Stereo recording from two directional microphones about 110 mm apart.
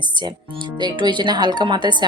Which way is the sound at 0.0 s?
45° right (ahead or behind).